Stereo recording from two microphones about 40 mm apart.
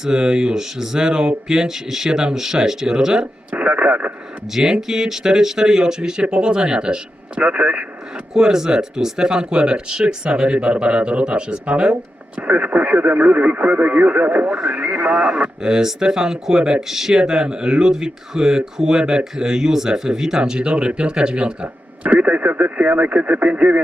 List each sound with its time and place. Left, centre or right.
0.0 s speech: centre
3.5 s speech: right
4.5 s speech: centre; by 7.9 s right
8.3 s speech: centre; by 14.5 s right
14.5 s speech: right
15.4 s speech: right
20.4 s speech: right